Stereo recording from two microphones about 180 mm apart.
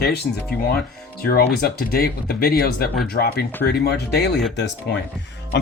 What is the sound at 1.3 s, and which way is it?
Speech, 60° left (ahead or behind).